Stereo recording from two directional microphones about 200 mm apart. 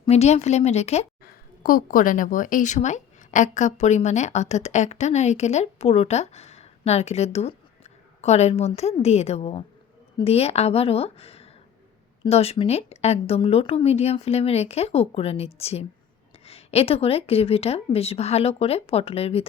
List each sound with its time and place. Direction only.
0.0 s a woman's voice: 30° left (ahead or behind)
1.2 s a woman's voice: 45° left (ahead or behind)